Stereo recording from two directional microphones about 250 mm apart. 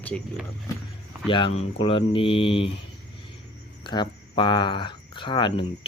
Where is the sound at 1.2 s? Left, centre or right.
Centre.